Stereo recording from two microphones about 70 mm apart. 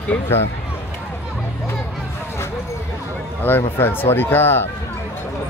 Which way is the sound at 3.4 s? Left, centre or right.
Left.